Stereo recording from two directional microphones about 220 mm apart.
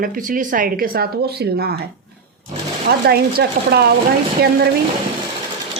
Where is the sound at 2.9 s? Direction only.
45° right (ahead or behind).